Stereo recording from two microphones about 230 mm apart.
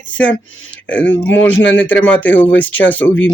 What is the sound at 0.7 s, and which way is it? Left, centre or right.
Speech, centre.